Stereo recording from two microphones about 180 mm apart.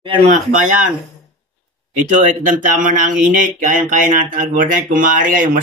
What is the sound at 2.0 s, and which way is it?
Speech, 45° right (ahead or behind).